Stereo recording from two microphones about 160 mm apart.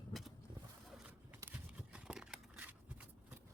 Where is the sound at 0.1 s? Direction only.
Centre (ahead or behind).